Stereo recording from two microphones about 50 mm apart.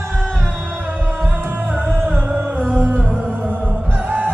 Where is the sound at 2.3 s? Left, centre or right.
Right.